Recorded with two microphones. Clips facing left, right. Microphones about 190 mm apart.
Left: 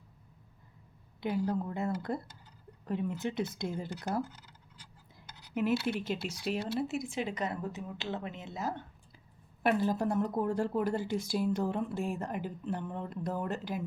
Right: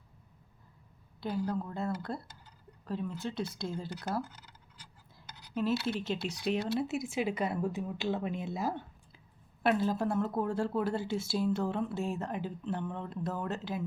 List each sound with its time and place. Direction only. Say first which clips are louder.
1.2 s speech: left 2 dB; 20° left (ahead or behind)
5.8 s a woman's voice: even; 10° left (ahead or behind); by 8.8 s 10° right (ahead or behind)
9.6 s a woman's voice: even; 15° left (ahead or behind)